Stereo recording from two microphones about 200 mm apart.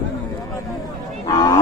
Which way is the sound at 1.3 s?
20° left (ahead or behind).